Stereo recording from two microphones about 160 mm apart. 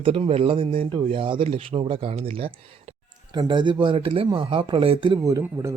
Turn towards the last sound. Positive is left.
turn(degrees=-20)  # may be behind; listen again after turning